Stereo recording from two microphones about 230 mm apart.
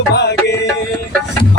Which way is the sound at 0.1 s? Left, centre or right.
Left.